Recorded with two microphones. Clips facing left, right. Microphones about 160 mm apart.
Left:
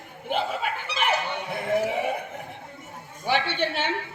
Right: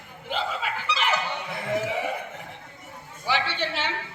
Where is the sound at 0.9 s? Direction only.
55° left (ahead or behind).